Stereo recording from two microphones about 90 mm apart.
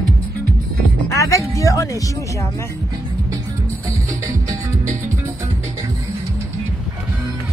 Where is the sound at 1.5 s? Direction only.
40° left (ahead or behind).